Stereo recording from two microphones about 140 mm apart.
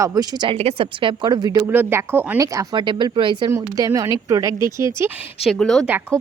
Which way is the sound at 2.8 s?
35° right (ahead or behind).